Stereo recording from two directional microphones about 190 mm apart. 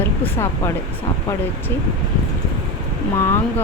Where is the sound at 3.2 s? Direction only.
15° left (ahead or behind).